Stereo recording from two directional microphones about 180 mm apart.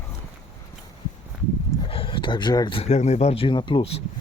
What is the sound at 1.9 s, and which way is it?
Speech, 30° left (ahead or behind).